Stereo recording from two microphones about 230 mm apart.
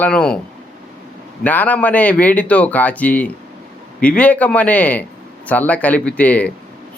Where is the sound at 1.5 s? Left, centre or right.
Centre.